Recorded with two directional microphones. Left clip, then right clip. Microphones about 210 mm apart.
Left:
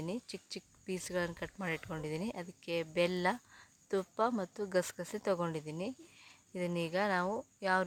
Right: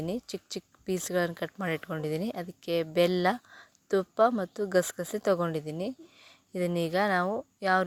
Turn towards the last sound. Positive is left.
turn(degrees=-20)  # may be behind; listen again after turning